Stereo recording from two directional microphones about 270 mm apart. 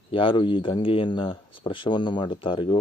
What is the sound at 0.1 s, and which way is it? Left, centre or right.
A man's voice, centre.